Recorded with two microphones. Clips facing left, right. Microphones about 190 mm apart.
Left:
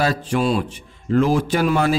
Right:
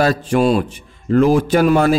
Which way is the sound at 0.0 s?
50° right (ahead or behind).